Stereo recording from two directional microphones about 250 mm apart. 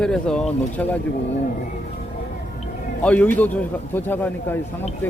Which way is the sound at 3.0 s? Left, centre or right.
Centre.